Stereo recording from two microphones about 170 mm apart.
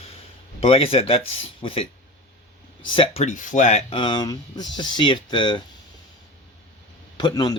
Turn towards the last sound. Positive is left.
turn(degrees=25)  # may be behind; listen again after turning